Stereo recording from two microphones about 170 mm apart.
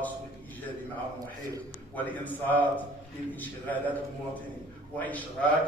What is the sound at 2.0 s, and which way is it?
A man's voice, 10° left (ahead or behind).